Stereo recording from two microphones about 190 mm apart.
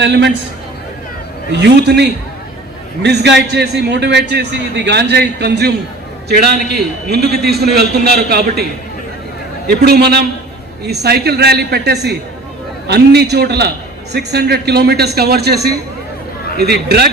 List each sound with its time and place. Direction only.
0.0 s a man's voice: 65° right (ahead or behind)
1.6 s a man's voice: 65° right (ahead or behind)
9.8 s a man's voice: 55° right (ahead or behind)